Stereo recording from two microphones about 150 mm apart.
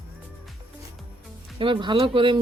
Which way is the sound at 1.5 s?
35° right (ahead or behind).